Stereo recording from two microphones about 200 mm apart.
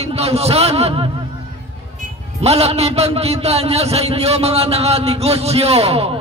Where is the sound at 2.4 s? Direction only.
30° right (ahead or behind).